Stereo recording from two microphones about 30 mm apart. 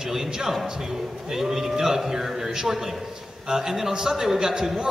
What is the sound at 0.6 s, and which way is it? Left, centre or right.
Speech, right.